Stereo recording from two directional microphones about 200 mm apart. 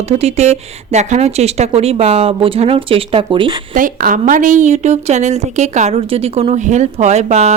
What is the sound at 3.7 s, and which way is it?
Speech, 40° right (ahead or behind).